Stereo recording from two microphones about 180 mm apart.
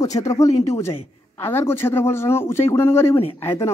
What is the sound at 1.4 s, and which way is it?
Speech, 15° left (ahead or behind).